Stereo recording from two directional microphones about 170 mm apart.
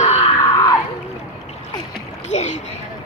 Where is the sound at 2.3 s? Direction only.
45° left (ahead or behind).